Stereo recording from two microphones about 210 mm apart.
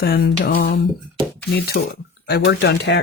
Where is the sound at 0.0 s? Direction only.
45° left (ahead or behind).